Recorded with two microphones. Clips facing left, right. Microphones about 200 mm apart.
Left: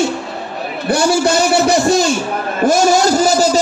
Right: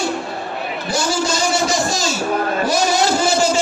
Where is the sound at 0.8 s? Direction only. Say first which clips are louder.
Left 8 dB; 60° left (ahead or behind).